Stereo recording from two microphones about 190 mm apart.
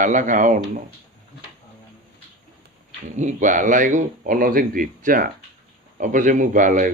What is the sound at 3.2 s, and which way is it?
Speech, 40° right (ahead or behind).